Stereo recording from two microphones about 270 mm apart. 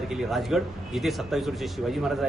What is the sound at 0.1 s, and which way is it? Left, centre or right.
A man's voice, centre.